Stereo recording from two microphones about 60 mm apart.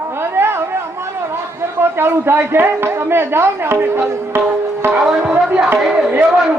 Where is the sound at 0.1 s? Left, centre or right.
Right.